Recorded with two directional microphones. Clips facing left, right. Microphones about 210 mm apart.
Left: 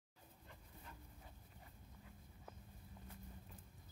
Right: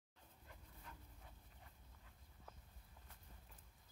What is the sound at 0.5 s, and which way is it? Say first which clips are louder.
Dog: left 1 dB; 5° left (ahead or behind).